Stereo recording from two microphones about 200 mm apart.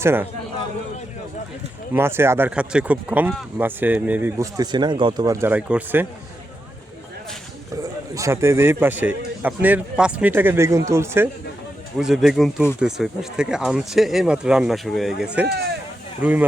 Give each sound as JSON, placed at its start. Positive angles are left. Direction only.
{"t": 0.0, "sound": "speech", "side_deg": -10}
{"t": 1.9, "sound": "speech", "side_deg": -10}
{"t": 8.1, "sound": "speech", "side_deg": -15}
{"t": 11.9, "sound": "speech", "side_deg": 0}